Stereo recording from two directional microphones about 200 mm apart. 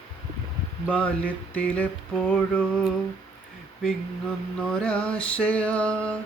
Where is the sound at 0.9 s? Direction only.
5° left (ahead or behind).